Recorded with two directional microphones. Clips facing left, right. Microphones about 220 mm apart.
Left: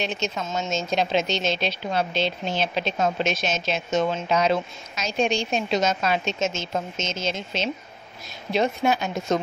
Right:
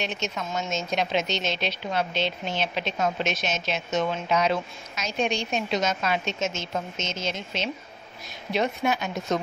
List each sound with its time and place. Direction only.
0.0 s a woman's voice: 30° left (ahead or behind)